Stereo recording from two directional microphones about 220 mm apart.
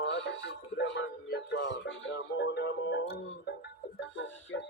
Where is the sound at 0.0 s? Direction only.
55° left (ahead or behind).